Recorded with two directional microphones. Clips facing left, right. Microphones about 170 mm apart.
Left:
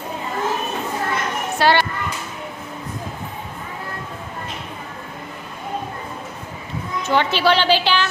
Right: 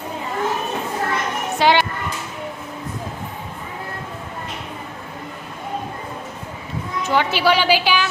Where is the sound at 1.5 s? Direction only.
15° right (ahead or behind).